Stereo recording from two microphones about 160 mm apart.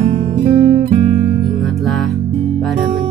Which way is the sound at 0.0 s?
40° right (ahead or behind).